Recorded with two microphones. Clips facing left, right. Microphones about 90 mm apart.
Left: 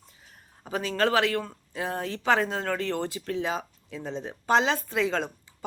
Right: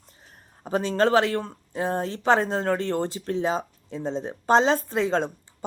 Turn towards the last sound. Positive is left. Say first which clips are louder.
# right 4 dB
turn(degrees=-30)  # may be behind; listen again after turning